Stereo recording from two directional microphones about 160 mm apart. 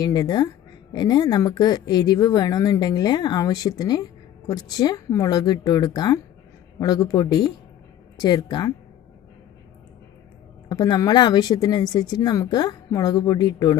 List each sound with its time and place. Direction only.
0.0 s speech: 25° left (ahead or behind)
10.7 s speech: 25° left (ahead or behind)